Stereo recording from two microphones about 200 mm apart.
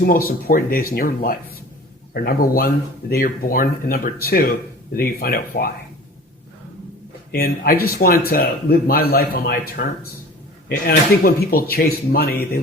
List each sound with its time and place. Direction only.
0.0 s speech: 45° left (ahead or behind)
7.3 s speech: 50° left (ahead or behind)